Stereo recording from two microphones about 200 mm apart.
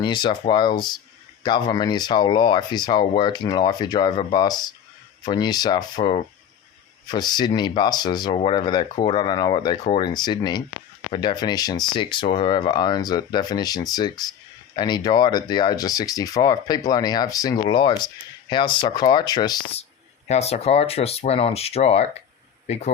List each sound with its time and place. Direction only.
0.0 s speech: 20° left (ahead or behind)
20.2 s speech: 35° left (ahead or behind)